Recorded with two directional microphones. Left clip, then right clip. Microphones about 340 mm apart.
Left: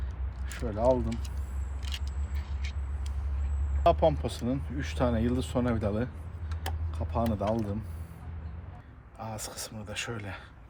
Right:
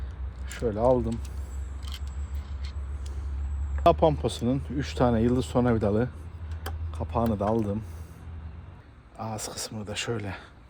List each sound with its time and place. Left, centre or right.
0.5 s speech: right
3.8 s speech: right
9.1 s speech: right